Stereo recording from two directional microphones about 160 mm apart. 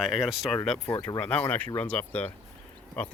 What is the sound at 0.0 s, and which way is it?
Speech, centre (ahead or behind).